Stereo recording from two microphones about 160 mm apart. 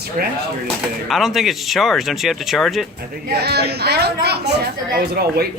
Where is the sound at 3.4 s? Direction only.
90° right.